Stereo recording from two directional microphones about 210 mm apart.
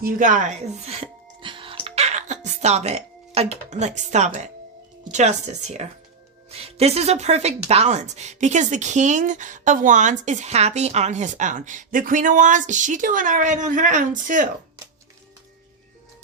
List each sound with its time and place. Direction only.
0.0 s speech: 40° right (ahead or behind)
1.4 s music: 25° right (ahead or behind)
5.1 s speech: 30° right (ahead or behind)